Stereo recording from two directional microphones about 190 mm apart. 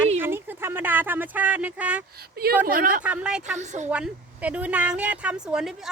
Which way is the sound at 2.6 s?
50° right (ahead or behind).